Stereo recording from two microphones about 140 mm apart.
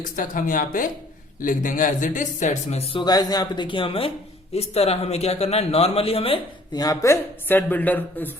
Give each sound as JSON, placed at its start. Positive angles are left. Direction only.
{"t": 0.0, "sound": "speech", "side_deg": 75}
{"t": 3.0, "sound": "a man's voice", "side_deg": 30}
{"t": 6.7, "sound": "speech", "side_deg": 25}